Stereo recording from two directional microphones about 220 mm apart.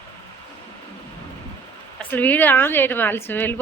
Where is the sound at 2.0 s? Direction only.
5° left (ahead or behind).